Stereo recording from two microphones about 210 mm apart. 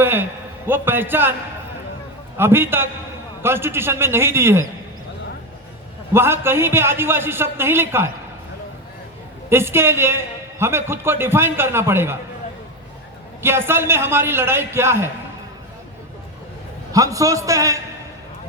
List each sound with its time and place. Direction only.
0.0 s a man's voice: 10° right (ahead or behind)
2.4 s a man's voice: 10° right (ahead or behind)
6.1 s a man's voice: 10° right (ahead or behind)
9.5 s a man's voice: 10° right (ahead or behind)
13.4 s a man's voice: 10° right (ahead or behind)
16.9 s a man's voice: 15° right (ahead or behind)